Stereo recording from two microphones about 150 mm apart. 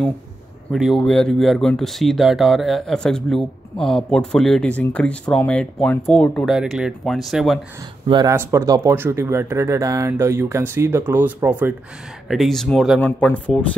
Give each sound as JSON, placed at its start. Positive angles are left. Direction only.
{"t": 0.7, "sound": "speech", "side_deg": 0}
{"t": 6.5, "sound": "speech", "side_deg": -5}
{"t": 8.1, "sound": "speech", "side_deg": -25}
{"t": 12.3, "sound": "speech", "side_deg": 0}